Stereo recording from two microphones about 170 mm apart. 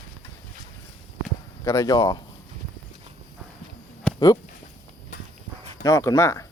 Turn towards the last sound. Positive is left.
turn(degrees=20)  # may be behind; listen again after turning